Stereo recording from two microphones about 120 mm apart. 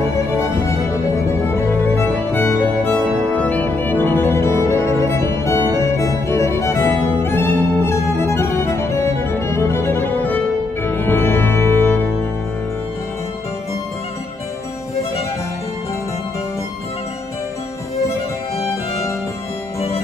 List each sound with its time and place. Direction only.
0.0 s music: 20° left (ahead or behind)